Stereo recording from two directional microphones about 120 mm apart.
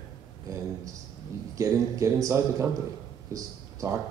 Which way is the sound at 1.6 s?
25° right (ahead or behind).